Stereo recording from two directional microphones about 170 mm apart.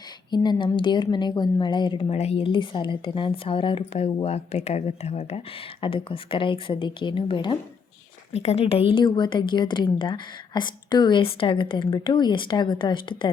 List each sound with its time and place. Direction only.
0.3 s speech: 25° left (ahead or behind)